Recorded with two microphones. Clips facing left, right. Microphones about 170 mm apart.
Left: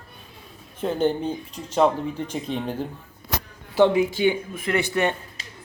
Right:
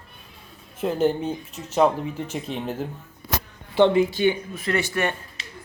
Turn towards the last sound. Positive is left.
turn(degrees=15)  # may be behind; listen again after turning